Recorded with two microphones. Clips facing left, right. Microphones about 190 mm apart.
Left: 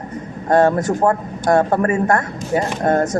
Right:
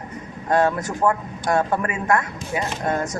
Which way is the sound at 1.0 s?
45° left (ahead or behind).